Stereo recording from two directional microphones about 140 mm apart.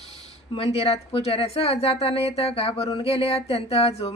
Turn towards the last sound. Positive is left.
turn(degrees=45)  # may be behind; listen again after turning